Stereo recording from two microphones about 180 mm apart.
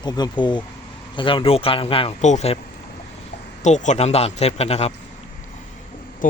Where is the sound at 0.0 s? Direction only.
25° left (ahead or behind); by 2.6 s 40° left (ahead or behind).